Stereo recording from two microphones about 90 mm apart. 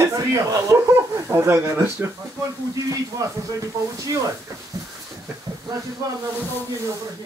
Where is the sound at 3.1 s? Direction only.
35° right (ahead or behind).